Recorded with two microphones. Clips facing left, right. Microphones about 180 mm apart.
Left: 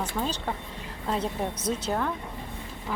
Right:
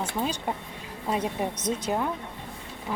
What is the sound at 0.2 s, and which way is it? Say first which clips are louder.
Speech: right 2 dB; 10° right (ahead or behind).